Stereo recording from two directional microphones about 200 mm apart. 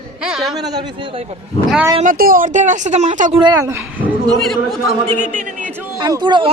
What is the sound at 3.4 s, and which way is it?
Speech, 15° right (ahead or behind).